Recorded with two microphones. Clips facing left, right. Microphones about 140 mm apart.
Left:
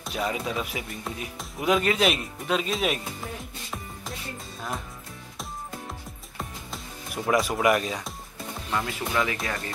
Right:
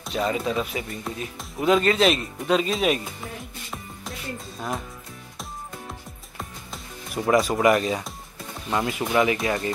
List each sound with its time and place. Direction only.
0.0 s speech: 5° left (ahead or behind)
7.2 s speech: centre (ahead or behind)
8.7 s speech: 20° right (ahead or behind)